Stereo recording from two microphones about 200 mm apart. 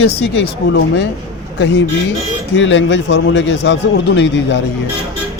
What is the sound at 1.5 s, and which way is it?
A man's voice, 65° left (ahead or behind).